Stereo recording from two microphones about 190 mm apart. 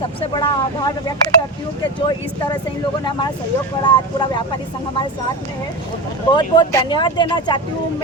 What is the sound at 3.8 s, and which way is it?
Speech, 25° left (ahead or behind).